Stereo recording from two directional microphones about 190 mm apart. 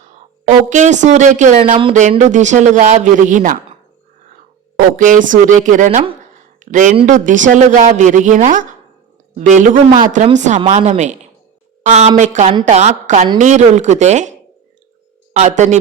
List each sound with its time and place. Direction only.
0.0 s a woman's voice: 40° right (ahead or behind)
4.9 s speech: 45° right (ahead or behind)